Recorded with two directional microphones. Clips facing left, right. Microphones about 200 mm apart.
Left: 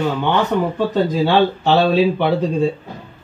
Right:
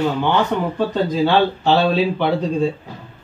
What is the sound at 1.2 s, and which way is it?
Speech, 5° left (ahead or behind).